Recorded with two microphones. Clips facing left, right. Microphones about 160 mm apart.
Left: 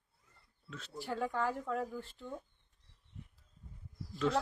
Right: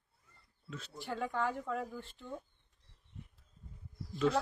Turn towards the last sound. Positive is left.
turn(degrees=0)  # may be behind; listen again after turning